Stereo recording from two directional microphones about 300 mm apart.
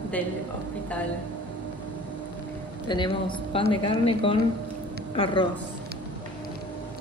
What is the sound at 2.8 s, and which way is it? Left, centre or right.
Speech, centre.